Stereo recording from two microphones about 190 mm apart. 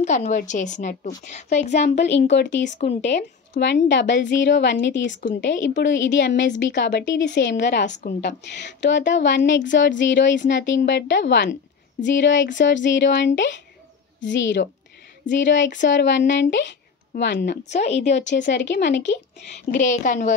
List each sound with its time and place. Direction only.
0.0 s a woman's voice: 40° left (ahead or behind)
2.0 s a woman's voice: 65° left (ahead or behind)
2.8 s a woman's voice: 35° left (ahead or behind)
3.1 s a woman's voice: 65° left (ahead or behind)
7.9 s a woman's voice: 40° left (ahead or behind)
8.2 s a woman's voice: 65° left (ahead or behind)
17.7 s a woman's voice: 35° left (ahead or behind)
18.1 s a woman's voice: 70° left (ahead or behind)
19.7 s a woman's voice: 40° left (ahead or behind)